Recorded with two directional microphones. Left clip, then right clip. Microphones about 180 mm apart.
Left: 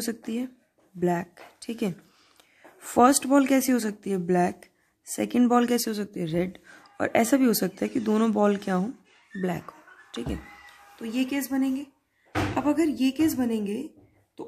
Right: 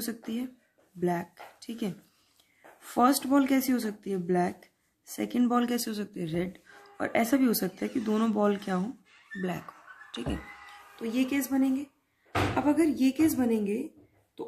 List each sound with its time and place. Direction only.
0.0 s speech: 30° left (ahead or behind)
9.4 s a sound: 35° left (ahead or behind)
11.0 s speech: 25° left (ahead or behind)